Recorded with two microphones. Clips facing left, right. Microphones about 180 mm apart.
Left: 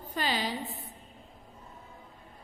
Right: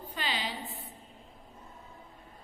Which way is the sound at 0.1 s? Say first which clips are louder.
Left 5 dB; 40° left (ahead or behind).